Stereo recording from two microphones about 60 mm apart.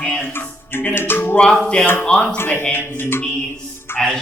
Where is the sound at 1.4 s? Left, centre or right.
Centre.